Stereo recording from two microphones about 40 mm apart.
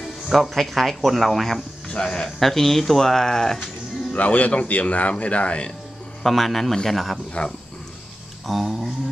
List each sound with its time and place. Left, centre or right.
0.0 s speech: centre
1.9 s speech: left
2.3 s speech: centre
4.1 s a man's voice: left
6.2 s speech: centre
7.4 s a man's voice: left
8.5 s speech: centre